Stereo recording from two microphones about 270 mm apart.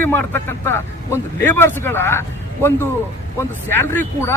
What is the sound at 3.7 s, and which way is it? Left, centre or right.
Speech, centre.